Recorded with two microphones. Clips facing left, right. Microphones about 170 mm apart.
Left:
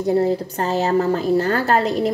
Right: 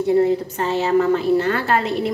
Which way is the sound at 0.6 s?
40° left (ahead or behind).